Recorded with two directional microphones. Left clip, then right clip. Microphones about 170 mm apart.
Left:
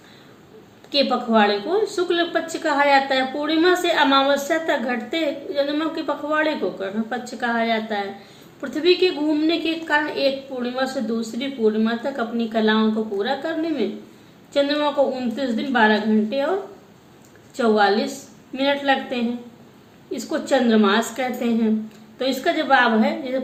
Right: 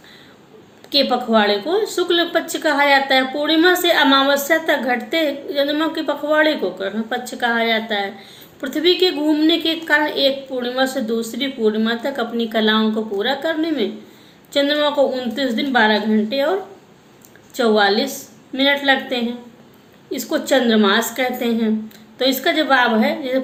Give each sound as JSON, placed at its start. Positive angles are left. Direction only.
{"t": 0.9, "sound": "a woman's voice", "side_deg": -15}
{"t": 17.6, "sound": "a woman's voice", "side_deg": -15}